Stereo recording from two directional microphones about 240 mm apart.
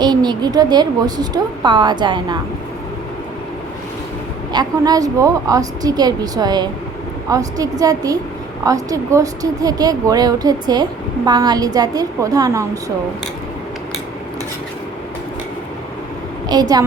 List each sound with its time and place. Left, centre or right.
0.0 s speech: centre
4.5 s speech: centre
16.5 s speech: centre